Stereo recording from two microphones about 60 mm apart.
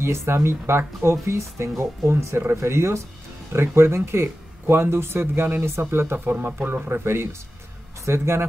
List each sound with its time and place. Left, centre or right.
0.0 s speech: right